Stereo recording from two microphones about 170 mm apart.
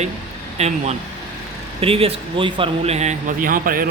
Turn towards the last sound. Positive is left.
turn(degrees=-55)  # may be behind; listen again after turning